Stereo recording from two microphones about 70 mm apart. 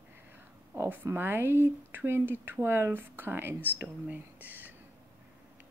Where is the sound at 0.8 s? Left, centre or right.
Right.